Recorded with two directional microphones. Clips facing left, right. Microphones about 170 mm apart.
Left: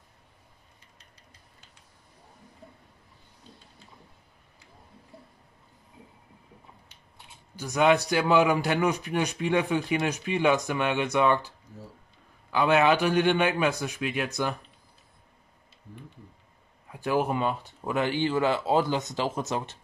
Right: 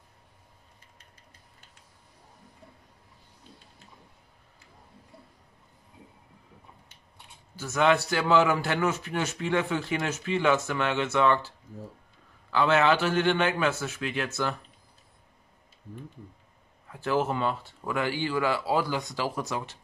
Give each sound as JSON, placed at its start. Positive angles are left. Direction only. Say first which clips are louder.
{"t": 7.5, "sound": "speech", "louder": "left 2 dB", "side_deg": 15}
{"t": 16.9, "sound": "speech", "louder": "left 1 dB", "side_deg": 15}